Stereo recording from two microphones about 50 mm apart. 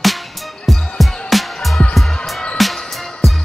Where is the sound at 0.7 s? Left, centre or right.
Centre.